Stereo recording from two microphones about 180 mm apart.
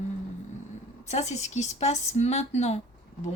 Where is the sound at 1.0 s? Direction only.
40° left (ahead or behind).